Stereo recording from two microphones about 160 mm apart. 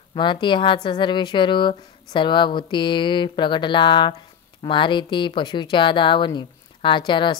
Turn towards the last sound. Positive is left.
turn(degrees=30)  # may be behind; listen again after turning